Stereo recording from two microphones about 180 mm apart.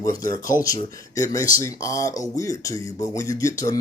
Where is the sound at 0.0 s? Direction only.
20° left (ahead or behind).